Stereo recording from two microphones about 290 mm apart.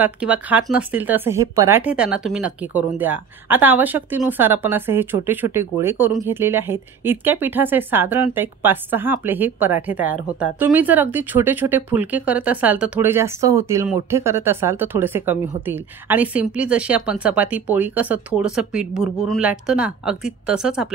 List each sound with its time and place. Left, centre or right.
0.0 s speech: centre